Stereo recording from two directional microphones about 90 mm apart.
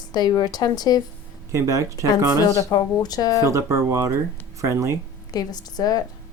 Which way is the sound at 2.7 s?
45° left (ahead or behind).